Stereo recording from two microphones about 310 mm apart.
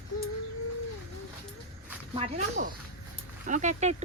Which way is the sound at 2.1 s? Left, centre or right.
Centre.